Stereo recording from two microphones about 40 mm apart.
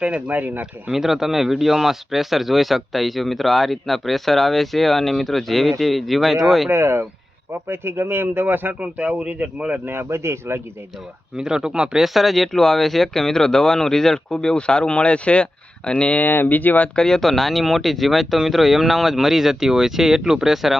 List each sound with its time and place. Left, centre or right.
0.3 s speech: right
0.9 s speech: centre
6.7 s a man's voice: right
8.8 s a man's voice: right
9.8 s a man's voice: right
11.3 s speech: centre
12.0 s speech: centre
12.5 s speech: centre; by 16.2 s left
16.2 s speech: left
16.9 s speech: centre
17.2 s speech: centre